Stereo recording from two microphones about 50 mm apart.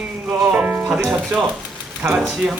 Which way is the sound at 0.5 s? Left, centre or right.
Right.